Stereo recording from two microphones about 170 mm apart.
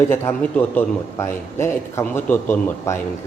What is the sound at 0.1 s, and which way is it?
A man's voice, 10° left (ahead or behind).